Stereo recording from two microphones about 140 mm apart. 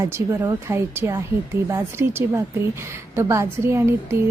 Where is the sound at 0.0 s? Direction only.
20° right (ahead or behind).